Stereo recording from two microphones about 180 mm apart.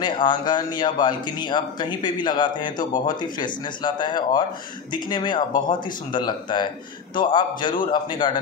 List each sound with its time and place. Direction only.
0.0 s a man's voice: 25° left (ahead or behind)